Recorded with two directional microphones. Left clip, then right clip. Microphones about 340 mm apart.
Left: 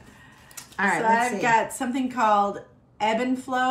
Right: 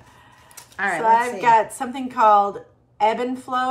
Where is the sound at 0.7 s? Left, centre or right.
Centre.